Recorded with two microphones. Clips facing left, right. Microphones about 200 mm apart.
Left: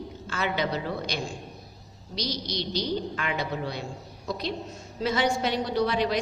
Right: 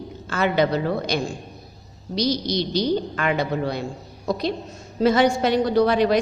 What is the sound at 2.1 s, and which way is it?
A woman's voice, 40° right (ahead or behind).